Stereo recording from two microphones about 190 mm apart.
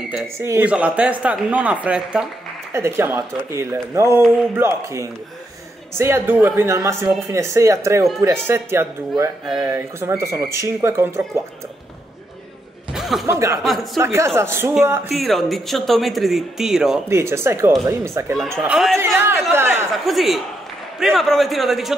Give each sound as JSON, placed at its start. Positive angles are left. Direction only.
{"t": 0.1, "sound": "speech", "side_deg": -10}
{"t": 12.9, "sound": "chuckle", "side_deg": 0}
{"t": 13.3, "sound": "speech", "side_deg": -15}
{"t": 15.0, "sound": "speech", "side_deg": 0}
{"t": 17.1, "sound": "speech", "side_deg": -15}
{"t": 18.3, "sound": "speech", "side_deg": 0}
{"t": 19.1, "sound": "speech", "side_deg": -10}
{"t": 19.9, "sound": "speech", "side_deg": 0}